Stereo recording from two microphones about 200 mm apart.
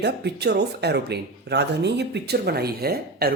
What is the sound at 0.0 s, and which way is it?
Speech, 55° right (ahead or behind).